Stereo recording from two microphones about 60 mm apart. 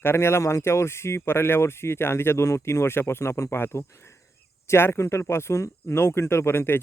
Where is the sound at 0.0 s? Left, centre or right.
Left.